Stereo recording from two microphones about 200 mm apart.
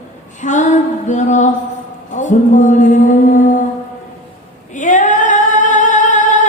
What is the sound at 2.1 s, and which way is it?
Mantra, 40° left (ahead or behind).